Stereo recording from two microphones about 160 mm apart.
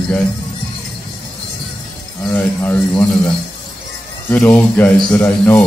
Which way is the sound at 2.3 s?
10° left (ahead or behind).